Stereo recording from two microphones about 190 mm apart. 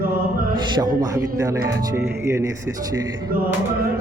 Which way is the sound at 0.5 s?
25° right (ahead or behind).